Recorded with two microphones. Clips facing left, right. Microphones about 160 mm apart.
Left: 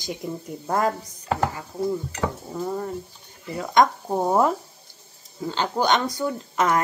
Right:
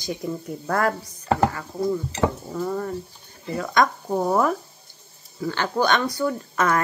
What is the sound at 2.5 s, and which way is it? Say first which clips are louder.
Speech: right 1 dB; 25° left (ahead or behind).